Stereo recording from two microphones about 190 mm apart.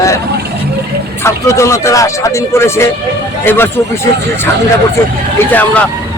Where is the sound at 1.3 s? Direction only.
15° left (ahead or behind).